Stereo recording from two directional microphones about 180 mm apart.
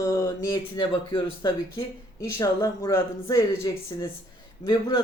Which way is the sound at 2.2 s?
15° left (ahead or behind).